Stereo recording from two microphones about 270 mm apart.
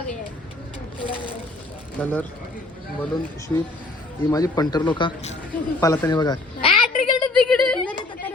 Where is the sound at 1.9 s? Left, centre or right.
Centre.